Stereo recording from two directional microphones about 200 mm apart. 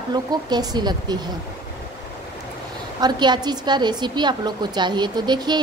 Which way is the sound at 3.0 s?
20° right (ahead or behind).